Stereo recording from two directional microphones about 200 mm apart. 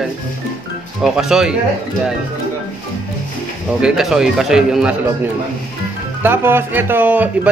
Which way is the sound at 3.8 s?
5° right (ahead or behind).